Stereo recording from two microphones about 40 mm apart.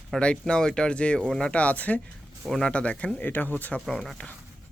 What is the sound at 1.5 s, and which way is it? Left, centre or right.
Speech, left.